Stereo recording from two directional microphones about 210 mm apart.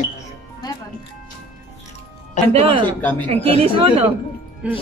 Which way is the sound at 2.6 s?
25° right (ahead or behind).